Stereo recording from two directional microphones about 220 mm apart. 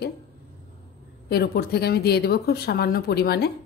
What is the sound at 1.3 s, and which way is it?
A woman's voice, 45° left (ahead or behind).